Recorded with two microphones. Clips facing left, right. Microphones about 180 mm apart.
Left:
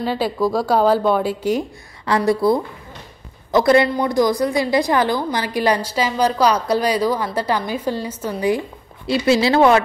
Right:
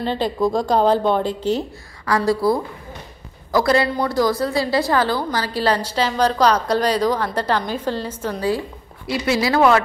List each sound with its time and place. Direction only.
0.0 s a woman's voice: 5° left (ahead or behind)
2.0 s a woman's voice: 20° left (ahead or behind)
3.5 s a woman's voice: 20° left (ahead or behind)